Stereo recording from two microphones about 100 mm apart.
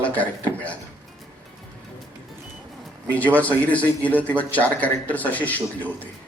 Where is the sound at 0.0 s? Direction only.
15° left (ahead or behind).